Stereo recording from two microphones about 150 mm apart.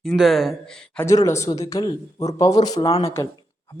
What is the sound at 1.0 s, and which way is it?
Speech, 20° left (ahead or behind).